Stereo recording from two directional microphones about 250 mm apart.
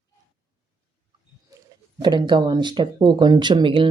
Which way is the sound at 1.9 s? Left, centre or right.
Centre.